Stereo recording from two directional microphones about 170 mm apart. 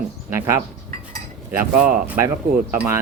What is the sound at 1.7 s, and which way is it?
Speech, 55° right (ahead or behind).